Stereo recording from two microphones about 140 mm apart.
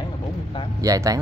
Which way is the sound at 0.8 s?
25° right (ahead or behind).